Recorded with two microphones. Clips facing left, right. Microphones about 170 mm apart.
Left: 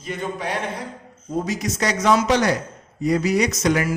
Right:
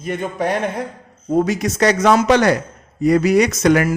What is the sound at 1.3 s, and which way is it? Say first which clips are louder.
Speech: right 7 dB; 60° right (ahead or behind).